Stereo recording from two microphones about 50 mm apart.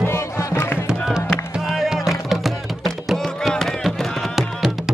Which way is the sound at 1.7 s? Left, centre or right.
Centre.